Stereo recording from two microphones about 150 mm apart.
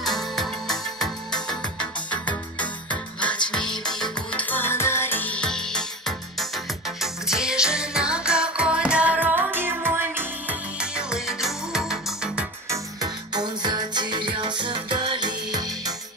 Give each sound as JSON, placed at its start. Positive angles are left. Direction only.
{"t": 0.0, "sound": "music", "side_deg": 0}
{"t": 1.8, "sound": "music", "side_deg": 10}
{"t": 12.6, "sound": "music", "side_deg": -25}